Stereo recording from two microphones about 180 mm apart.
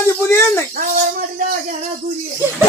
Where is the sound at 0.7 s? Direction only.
50° right (ahead or behind).